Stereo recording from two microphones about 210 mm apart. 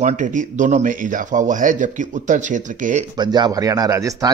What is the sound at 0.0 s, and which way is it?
A man's voice, 35° right (ahead or behind).